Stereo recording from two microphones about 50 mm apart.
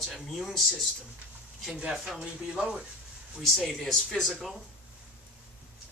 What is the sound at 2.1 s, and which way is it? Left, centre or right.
Speech, centre.